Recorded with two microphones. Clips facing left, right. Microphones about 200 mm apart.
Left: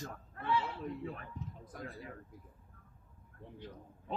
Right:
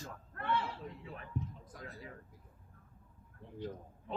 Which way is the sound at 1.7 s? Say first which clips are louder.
Left 5 dB; 55° left (ahead or behind).